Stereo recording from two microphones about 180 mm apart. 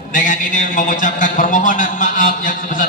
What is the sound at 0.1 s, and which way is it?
A man's voice, 45° left (ahead or behind).